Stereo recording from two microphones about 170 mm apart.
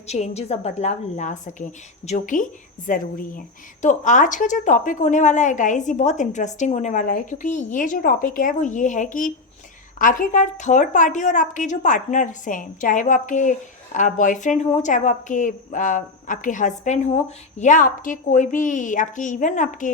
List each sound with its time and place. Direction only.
0.1 s a woman's voice: 40° left (ahead or behind)